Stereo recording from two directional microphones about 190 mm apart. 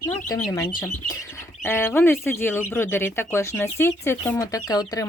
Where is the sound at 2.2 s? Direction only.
10° left (ahead or behind).